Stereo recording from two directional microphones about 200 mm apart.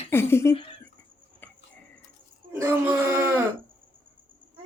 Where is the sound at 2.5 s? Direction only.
10° right (ahead or behind).